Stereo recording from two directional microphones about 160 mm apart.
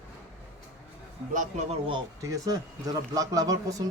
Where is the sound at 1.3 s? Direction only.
50° right (ahead or behind).